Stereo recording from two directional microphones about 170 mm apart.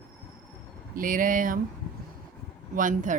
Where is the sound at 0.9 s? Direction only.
55° right (ahead or behind).